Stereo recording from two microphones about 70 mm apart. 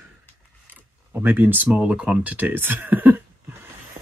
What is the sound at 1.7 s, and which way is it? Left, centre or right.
Speech, centre.